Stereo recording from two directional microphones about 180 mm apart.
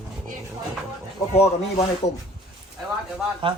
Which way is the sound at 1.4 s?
35° left (ahead or behind).